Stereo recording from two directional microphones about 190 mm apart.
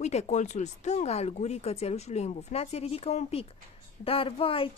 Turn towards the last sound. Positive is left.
turn(degrees=30)  # may be behind; listen again after turning